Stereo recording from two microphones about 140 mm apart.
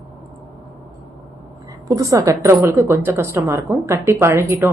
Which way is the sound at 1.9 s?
20° right (ahead or behind).